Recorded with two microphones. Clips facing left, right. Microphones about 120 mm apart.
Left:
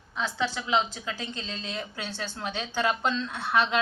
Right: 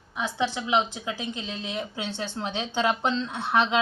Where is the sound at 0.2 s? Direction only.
15° right (ahead or behind).